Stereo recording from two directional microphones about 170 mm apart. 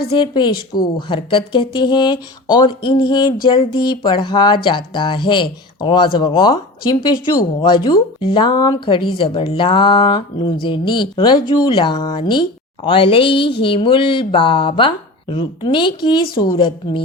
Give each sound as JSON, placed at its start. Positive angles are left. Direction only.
{"t": 0.2, "sound": "a woman's voice", "side_deg": 25}